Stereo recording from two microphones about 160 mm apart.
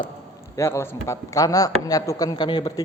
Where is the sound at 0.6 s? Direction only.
15° left (ahead or behind).